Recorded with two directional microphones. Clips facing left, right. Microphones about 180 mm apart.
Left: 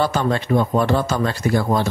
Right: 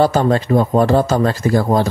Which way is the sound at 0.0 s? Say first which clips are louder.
Right 6 dB; 40° right (ahead or behind).